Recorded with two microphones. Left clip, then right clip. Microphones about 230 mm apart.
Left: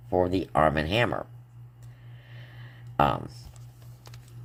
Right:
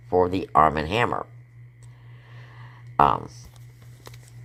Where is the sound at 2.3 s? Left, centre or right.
Centre.